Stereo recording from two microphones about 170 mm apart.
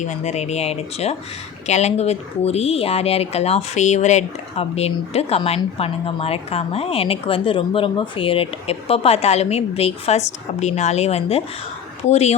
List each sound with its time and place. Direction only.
0.0 s speech: 45° left (ahead or behind)